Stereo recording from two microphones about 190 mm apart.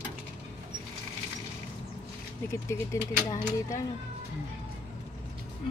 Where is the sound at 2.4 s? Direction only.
15° left (ahead or behind).